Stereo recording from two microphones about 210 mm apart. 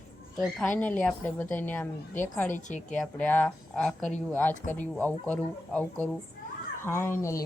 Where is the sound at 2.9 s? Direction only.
5° left (ahead or behind).